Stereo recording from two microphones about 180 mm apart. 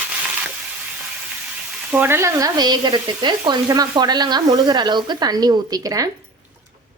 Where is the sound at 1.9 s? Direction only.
10° right (ahead or behind).